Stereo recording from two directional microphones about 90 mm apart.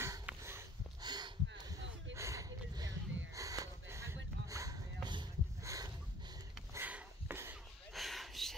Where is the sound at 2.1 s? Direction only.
35° right (ahead or behind).